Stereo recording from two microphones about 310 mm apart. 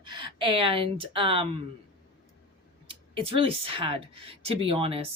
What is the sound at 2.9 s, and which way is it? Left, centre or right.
Speech, centre.